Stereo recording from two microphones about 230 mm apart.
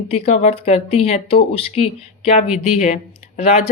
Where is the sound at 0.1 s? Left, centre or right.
Left.